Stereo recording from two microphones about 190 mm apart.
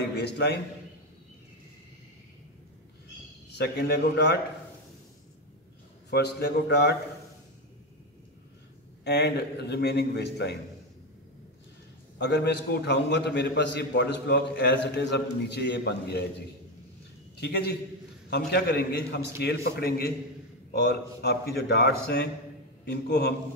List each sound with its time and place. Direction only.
0.1 s a man's voice: 60° left (ahead or behind)
3.5 s a man's voice: 55° left (ahead or behind)
6.0 s a man's voice: 60° left (ahead or behind)
9.0 s a man's voice: 60° left (ahead or behind)
12.2 s a man's voice: 60° left (ahead or behind)